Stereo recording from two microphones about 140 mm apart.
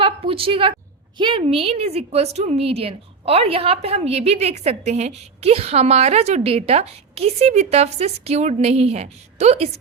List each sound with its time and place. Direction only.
0.0 s a woman's voice: 40° right (ahead or behind)